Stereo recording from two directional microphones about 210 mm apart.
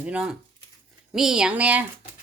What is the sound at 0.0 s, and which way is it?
A woman's voice, 5° right (ahead or behind).